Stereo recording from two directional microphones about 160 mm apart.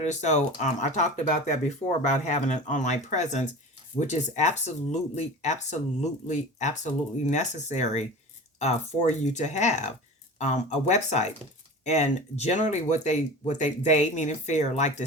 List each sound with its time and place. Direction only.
0.0 s speech: 45° left (ahead or behind)